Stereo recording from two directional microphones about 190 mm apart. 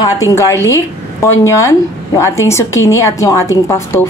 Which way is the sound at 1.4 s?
15° left (ahead or behind).